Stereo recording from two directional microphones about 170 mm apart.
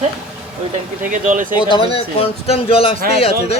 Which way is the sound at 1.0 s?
50° right (ahead or behind).